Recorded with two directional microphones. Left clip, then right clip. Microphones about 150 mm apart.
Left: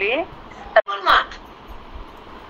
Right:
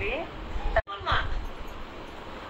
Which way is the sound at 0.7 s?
65° left (ahead or behind).